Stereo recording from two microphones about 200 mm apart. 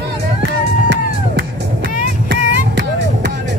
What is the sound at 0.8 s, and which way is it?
Music, 65° right (ahead or behind).